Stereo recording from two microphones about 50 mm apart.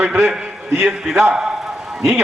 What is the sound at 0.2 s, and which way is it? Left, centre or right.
Speech, centre.